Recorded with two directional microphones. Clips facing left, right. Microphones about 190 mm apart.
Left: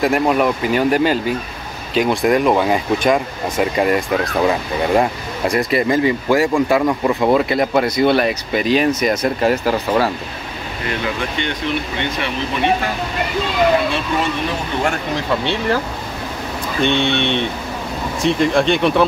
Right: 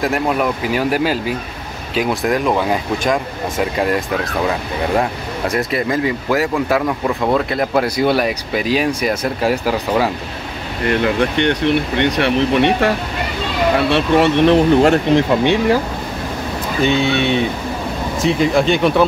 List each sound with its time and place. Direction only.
0.0 s speech: centre (ahead or behind)
10.9 s speech: 60° right (ahead or behind)
15.1 s speech: 15° right (ahead or behind)
16.8 s speech: 5° right (ahead or behind)